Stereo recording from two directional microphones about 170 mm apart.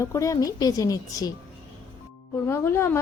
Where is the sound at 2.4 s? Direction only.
15° left (ahead or behind).